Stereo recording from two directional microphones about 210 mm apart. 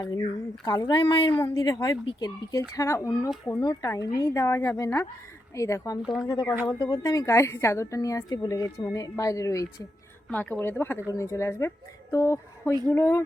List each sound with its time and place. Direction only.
0.2 s a woman's voice: 20° left (ahead or behind)
12.1 s a sound: 15° left (ahead or behind)
12.9 s a woman's voice: 15° left (ahead or behind)